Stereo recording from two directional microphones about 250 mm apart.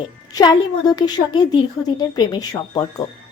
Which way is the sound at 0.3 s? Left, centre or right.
Centre.